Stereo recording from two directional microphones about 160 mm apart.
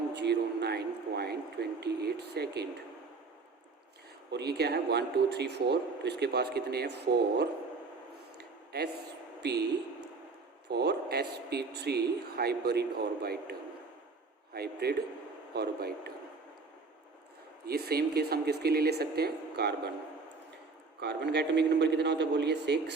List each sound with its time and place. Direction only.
0.1 s a sound: 90° right
4.3 s speech: 90° right
8.4 s a sound: 85° right
9.4 s speech: 90° right
10.7 s a man's voice: 90° right
17.7 s speech: 75° right (ahead or behind)
21.0 s speech: 90° right